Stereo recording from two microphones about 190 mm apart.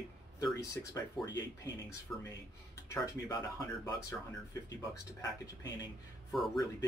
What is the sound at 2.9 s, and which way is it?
A man's voice, 20° left (ahead or behind).